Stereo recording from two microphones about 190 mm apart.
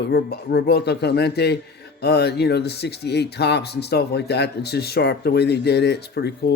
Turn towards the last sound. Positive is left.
turn(degrees=60)  # may be behind; listen again after turning